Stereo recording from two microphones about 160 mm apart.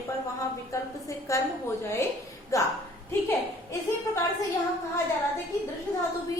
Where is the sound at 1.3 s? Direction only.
20° left (ahead or behind).